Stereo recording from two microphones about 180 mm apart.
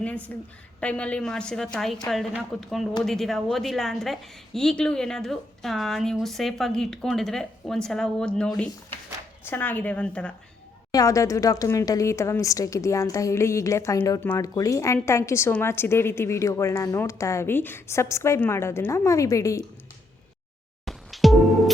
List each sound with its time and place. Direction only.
0.3 s a woman's voice: 10° left (ahead or behind)
10.9 s a woman's voice: 20° left (ahead or behind)
20.8 s music: centre (ahead or behind)